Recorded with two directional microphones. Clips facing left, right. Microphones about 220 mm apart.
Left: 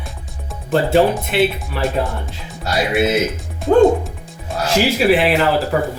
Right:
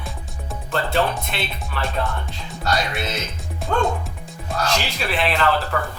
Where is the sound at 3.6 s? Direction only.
20° left (ahead or behind).